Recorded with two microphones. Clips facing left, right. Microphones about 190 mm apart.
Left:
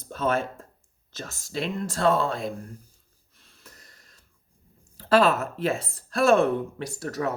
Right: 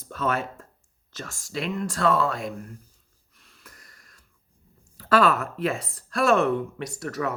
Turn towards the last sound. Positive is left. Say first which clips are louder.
# even
turn(degrees=30)  # may be behind; listen again after turning